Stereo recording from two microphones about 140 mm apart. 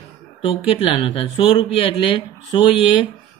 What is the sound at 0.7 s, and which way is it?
Speech, 40° left (ahead or behind).